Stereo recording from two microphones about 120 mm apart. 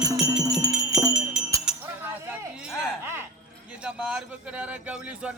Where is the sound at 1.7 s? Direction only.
5° right (ahead or behind).